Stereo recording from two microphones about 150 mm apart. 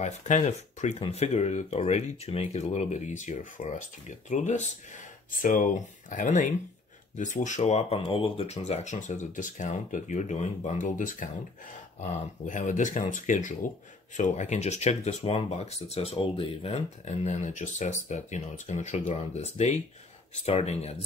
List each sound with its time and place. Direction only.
0.0 s speech: 55° left (ahead or behind)